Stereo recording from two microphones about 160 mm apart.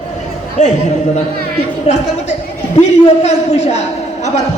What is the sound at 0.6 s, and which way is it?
Speech, 50° left (ahead or behind).